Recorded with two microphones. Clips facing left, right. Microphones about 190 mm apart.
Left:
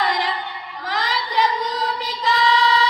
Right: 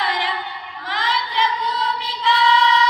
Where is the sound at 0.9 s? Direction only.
40° left (ahead or behind).